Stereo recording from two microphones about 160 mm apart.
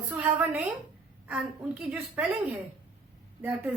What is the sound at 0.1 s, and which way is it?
Speech, 15° right (ahead or behind).